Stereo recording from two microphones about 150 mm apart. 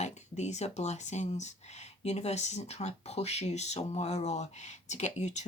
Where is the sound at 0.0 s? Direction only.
50° left (ahead or behind).